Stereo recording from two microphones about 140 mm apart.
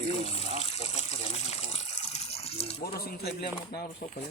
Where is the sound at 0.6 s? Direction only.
50° left (ahead or behind).